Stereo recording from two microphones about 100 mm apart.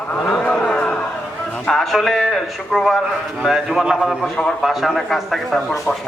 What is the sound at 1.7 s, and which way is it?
A man's voice, centre (ahead or behind).